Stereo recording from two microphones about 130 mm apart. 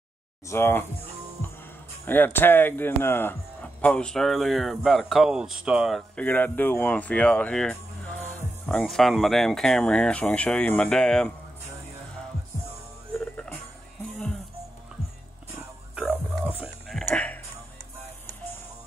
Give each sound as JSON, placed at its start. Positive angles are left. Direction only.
{"t": 0.5, "sound": "speech", "side_deg": 20}
{"t": 2.0, "sound": "speech", "side_deg": 15}
{"t": 6.1, "sound": "speech", "side_deg": 15}
{"t": 13.2, "sound": "music", "side_deg": 5}
{"t": 16.6, "sound": "music", "side_deg": 5}